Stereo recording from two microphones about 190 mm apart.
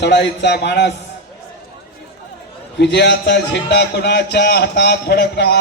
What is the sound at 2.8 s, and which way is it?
A man's voice, 65° left (ahead or behind).